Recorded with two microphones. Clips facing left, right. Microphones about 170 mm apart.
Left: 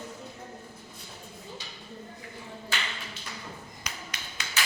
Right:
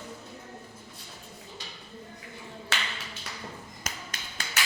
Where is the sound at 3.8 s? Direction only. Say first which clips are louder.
Right 1 dB; 45° right (ahead or behind).